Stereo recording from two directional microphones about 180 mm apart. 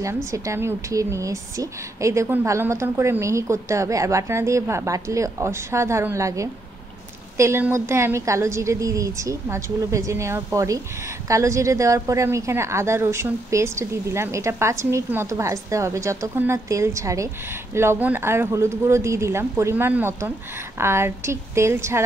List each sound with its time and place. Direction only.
0.0 s a woman's voice: 15° right (ahead or behind)